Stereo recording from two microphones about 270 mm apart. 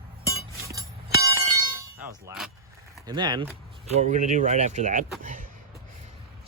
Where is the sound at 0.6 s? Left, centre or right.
Centre.